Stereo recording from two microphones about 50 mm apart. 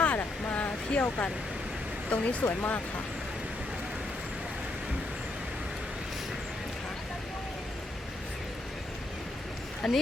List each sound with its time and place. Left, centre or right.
0.0 s a sound: left
0.9 s speech: left
2.4 s speech: left
9.8 s speech: centre